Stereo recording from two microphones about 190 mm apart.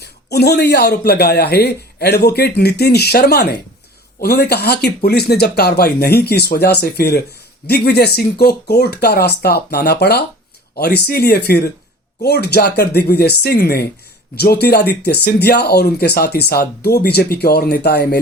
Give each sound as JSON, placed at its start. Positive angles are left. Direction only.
{"t": 0.0, "sound": "a man's voice", "side_deg": 60}